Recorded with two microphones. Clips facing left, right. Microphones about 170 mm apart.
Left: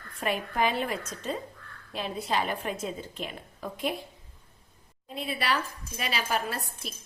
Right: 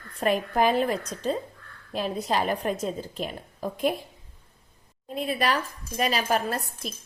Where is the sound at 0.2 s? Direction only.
40° right (ahead or behind).